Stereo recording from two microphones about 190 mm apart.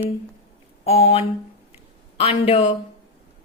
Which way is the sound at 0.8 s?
35° left (ahead or behind).